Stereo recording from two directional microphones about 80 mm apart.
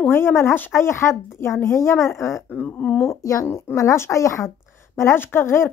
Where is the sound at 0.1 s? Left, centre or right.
Left.